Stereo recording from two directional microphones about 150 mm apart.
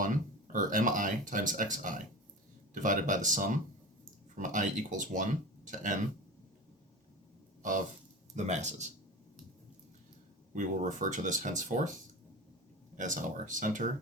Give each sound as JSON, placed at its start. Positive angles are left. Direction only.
{"t": 0.5, "sound": "speech", "side_deg": -60}
{"t": 7.6, "sound": "speech", "side_deg": -60}
{"t": 10.5, "sound": "speech", "side_deg": -55}
{"t": 13.0, "sound": "speech", "side_deg": -60}